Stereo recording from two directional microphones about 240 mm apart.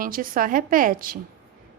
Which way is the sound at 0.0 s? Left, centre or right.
Right.